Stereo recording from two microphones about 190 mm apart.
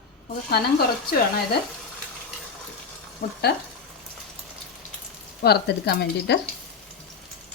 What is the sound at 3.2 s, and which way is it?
Speech, 55° left (ahead or behind).